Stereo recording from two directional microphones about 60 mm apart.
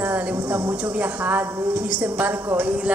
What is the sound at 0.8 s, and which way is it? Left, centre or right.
A woman's voice, right.